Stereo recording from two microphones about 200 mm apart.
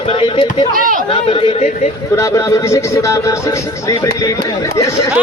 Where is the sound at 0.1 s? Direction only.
25° left (ahead or behind).